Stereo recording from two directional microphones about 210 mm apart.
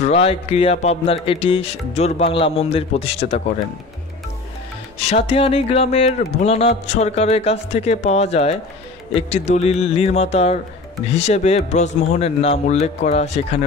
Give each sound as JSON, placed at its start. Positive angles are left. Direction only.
{"t": 0.0, "sound": "speech", "side_deg": 30}
{"t": 4.9, "sound": "speech", "side_deg": 30}